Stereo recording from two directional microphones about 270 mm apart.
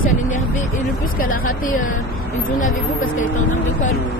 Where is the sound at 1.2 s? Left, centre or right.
Left.